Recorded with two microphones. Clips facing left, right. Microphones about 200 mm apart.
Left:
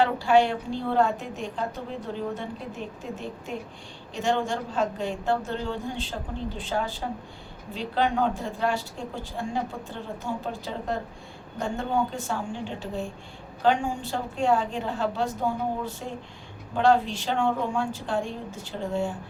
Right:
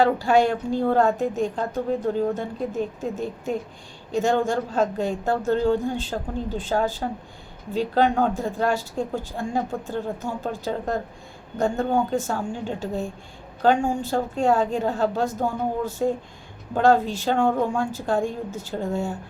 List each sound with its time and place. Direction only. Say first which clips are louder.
0.0 s speech: right 2 dB; 45° right (ahead or behind)